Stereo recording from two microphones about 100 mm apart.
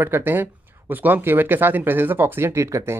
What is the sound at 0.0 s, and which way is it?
Speech, 20° right (ahead or behind).